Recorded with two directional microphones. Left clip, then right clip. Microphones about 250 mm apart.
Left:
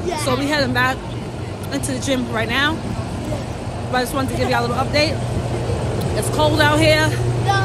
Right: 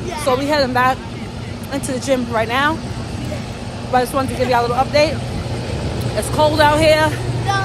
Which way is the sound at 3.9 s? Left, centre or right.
Centre.